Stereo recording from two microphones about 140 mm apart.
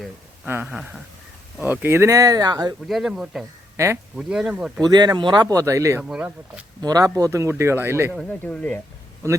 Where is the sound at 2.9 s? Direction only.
Centre (ahead or behind).